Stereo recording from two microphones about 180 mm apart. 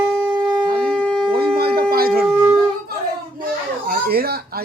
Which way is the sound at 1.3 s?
60° right (ahead or behind).